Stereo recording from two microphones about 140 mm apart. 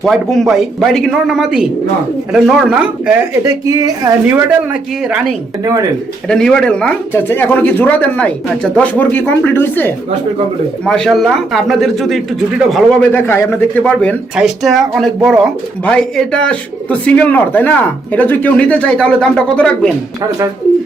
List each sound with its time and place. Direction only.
0.0 s a man's voice: centre (ahead or behind)
3.4 s speech: 25° right (ahead or behind)
4.3 s speech: 10° right (ahead or behind)
6.2 s a man's voice: 5° left (ahead or behind)
10.8 s a man's voice: 5° left (ahead or behind)
14.3 s a man's voice: centre (ahead or behind)